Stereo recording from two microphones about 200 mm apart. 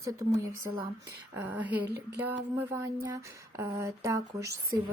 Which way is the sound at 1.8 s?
55° right (ahead or behind).